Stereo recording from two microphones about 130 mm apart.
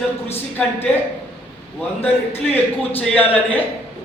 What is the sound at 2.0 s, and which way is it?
A man's voice, 15° left (ahead or behind).